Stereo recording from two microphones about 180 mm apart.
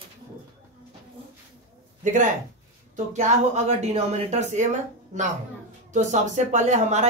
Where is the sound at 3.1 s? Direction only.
40° right (ahead or behind).